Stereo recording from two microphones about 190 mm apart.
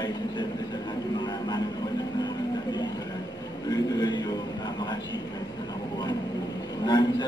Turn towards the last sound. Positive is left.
turn(degrees=20)  # may be behind; listen again after turning